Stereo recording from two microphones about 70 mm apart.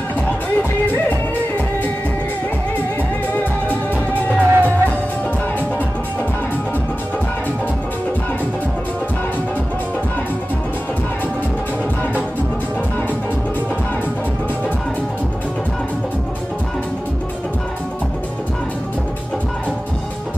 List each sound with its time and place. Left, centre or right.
4.4 s music: right